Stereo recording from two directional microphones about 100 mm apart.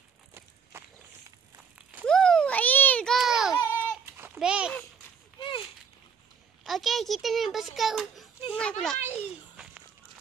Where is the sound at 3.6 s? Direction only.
25° left (ahead or behind).